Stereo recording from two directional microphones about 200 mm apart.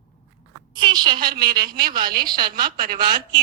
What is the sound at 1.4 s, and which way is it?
A woman's voice, 50° right (ahead or behind).